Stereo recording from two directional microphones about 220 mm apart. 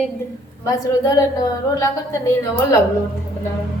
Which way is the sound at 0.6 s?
15° left (ahead or behind).